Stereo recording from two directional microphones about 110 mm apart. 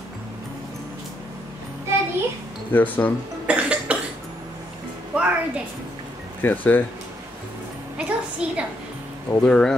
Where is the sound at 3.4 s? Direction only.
10° right (ahead or behind).